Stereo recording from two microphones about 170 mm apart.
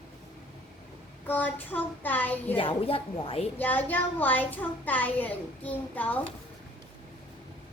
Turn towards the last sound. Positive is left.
turn(degrees=10)  # may be behind; listen again after turning